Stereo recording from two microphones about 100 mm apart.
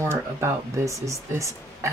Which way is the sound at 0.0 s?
25° right (ahead or behind).